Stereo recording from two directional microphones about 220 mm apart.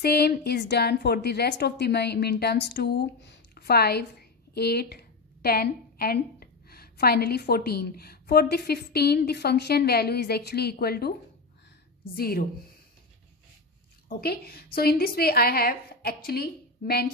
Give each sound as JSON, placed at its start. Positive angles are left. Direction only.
{"t": 0.0, "sound": "a woman's voice", "side_deg": 45}
{"t": 12.2, "sound": "a woman's voice", "side_deg": 45}
{"t": 14.0, "sound": "a woman's voice", "side_deg": 45}